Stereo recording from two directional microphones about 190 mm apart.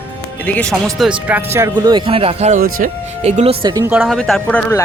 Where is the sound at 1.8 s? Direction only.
25° right (ahead or behind).